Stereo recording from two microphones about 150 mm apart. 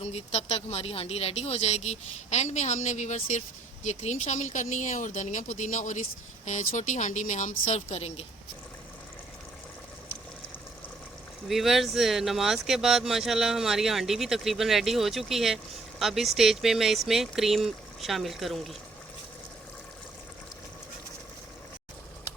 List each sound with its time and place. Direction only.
0.0 s speech: 45° left (ahead or behind)
11.4 s speech: centre (ahead or behind)